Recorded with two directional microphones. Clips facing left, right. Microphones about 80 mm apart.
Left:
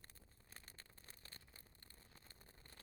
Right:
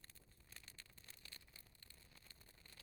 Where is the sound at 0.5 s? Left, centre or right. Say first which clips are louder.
Left 1 dB; left.